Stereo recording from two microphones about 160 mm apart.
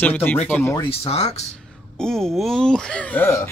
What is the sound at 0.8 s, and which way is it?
Speech, 35° left (ahead or behind).